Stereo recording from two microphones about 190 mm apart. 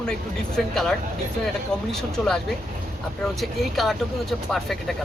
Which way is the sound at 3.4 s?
Centre (ahead or behind).